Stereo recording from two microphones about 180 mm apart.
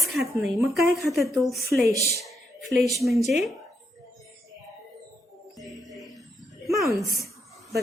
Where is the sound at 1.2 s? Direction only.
20° right (ahead or behind).